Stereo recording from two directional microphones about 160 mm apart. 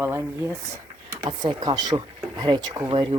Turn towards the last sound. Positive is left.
turn(degrees=-30)  # may be behind; listen again after turning